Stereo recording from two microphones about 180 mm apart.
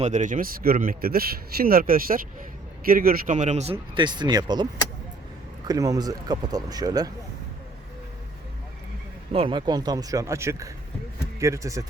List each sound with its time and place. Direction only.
0.0 s speech: 40° right (ahead or behind); by 7.1 s 20° right (ahead or behind)
9.3 s speech: 30° right (ahead or behind)